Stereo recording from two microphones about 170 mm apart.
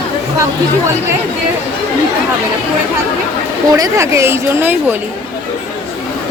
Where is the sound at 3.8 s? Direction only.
15° right (ahead or behind).